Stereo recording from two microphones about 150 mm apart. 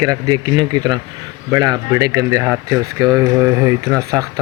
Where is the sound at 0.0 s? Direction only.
25° right (ahead or behind).